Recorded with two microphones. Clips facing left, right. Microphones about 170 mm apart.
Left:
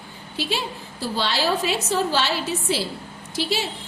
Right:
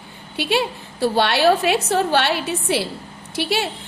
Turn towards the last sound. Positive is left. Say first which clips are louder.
# right 3 dB
turn(degrees=-65)  # may be behind; listen again after turning